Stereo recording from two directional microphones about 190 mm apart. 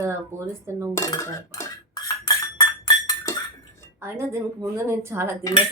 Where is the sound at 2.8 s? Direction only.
20° left (ahead or behind).